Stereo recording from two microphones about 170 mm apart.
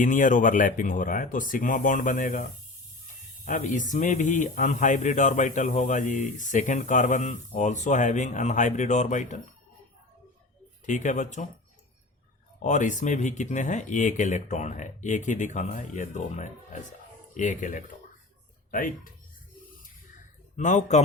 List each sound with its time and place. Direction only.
0.0 s speech: 50° left (ahead or behind)
10.8 s speech: 45° left (ahead or behind)
12.6 s speech: 45° left (ahead or behind)
20.6 s speech: 45° left (ahead or behind)